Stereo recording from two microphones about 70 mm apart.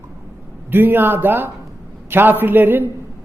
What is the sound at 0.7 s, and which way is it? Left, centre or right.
A man's voice, right.